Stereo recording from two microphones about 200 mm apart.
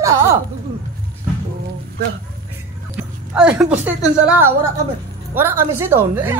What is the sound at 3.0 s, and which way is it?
A woman's voice, 5° right (ahead or behind).